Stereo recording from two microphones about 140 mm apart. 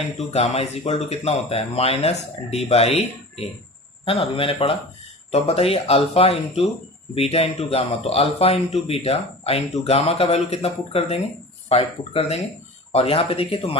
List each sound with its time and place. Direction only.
0.3 s a man's voice: 50° left (ahead or behind)